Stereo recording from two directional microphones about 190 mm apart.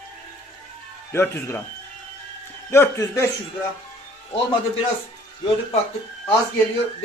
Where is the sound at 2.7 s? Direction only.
15° left (ahead or behind).